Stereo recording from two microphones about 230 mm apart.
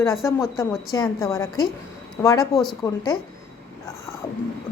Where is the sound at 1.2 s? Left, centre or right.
Centre.